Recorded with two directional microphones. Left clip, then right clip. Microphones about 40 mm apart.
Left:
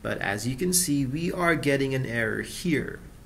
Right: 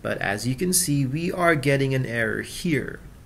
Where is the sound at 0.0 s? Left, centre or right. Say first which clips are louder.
Right 3 dB; right.